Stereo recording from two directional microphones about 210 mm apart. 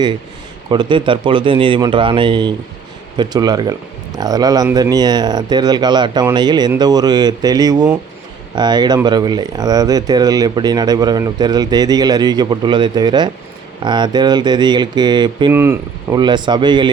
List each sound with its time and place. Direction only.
0.7 s speech: 20° right (ahead or behind)